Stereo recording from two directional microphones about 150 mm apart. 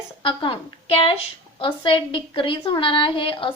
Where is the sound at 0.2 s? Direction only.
35° left (ahead or behind).